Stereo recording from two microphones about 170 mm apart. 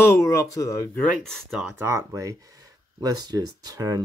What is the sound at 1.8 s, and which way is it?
Speech, 20° right (ahead or behind).